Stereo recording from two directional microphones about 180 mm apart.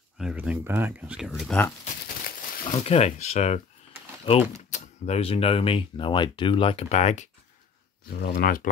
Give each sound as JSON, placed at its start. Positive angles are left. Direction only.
{"t": 0.2, "sound": "speech", "side_deg": -5}
{"t": 2.7, "sound": "speech", "side_deg": 35}
{"t": 8.1, "sound": "speech", "side_deg": 65}